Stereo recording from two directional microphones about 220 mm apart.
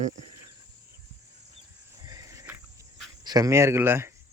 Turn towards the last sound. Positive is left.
turn(degrees=-10)  # may be behind; listen again after turning